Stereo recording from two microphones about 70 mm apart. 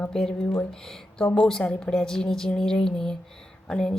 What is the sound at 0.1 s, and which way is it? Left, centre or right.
A woman's voice, centre.